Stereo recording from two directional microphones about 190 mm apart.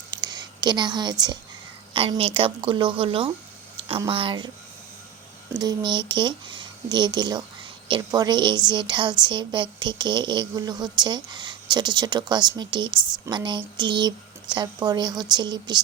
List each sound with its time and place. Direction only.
0.1 s a sound: 20° right (ahead or behind)
1.9 s a woman's voice: 30° right (ahead or behind)
5.5 s a woman's voice: 20° right (ahead or behind)